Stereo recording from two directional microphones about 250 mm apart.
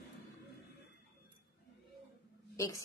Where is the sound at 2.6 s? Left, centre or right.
Centre.